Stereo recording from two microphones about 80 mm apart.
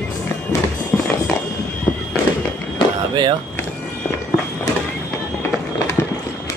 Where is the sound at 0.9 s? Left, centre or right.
Centre.